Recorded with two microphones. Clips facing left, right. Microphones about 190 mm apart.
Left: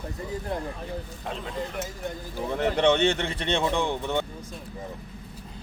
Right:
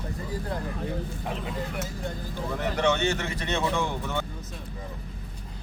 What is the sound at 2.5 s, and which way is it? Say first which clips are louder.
Speech: left 4 dB; 25° left (ahead or behind).